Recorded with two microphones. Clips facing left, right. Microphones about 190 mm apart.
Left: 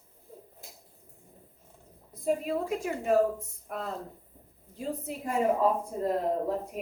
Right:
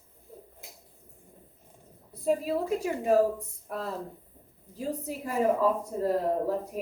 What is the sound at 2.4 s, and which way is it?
Speech, 35° right (ahead or behind).